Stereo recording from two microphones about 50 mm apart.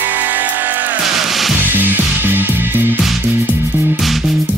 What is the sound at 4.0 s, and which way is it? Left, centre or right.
Music, centre.